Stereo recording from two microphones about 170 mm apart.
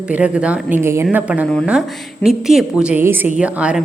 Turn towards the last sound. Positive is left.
turn(degrees=-5)  # may be behind; listen again after turning